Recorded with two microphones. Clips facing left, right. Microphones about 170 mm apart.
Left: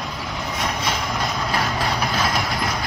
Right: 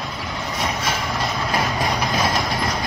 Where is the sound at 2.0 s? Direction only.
25° right (ahead or behind).